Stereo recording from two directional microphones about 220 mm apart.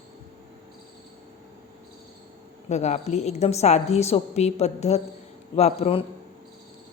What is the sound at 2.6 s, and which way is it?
A woman's voice, 30° left (ahead or behind).